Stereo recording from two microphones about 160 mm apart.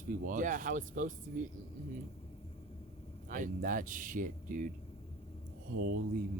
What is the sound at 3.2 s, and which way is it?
Speech, 55° right (ahead or behind).